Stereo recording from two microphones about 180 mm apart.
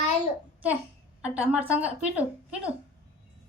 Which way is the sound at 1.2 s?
5° right (ahead or behind).